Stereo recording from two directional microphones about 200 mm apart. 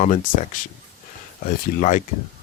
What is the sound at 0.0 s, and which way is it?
Speech, 40° left (ahead or behind).